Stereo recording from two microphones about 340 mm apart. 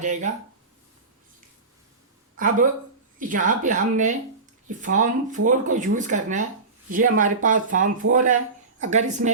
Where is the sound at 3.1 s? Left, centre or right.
Right.